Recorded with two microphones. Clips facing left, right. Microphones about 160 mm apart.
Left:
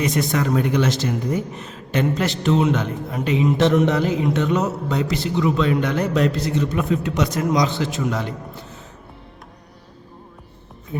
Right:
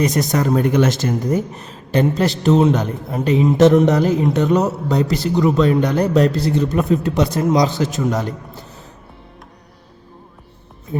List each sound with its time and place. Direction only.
0.0 s speech: 40° right (ahead or behind)